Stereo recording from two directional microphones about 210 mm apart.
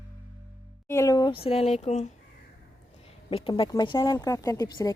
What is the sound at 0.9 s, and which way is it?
Speech, 15° left (ahead or behind).